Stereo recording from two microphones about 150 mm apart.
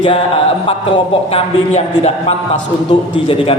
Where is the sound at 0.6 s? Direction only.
35° left (ahead or behind).